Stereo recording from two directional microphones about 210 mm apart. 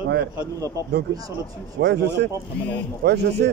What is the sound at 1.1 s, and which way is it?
Speech, 55° right (ahead or behind).